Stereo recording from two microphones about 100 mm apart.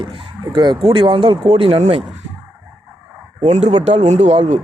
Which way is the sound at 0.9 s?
60° right (ahead or behind).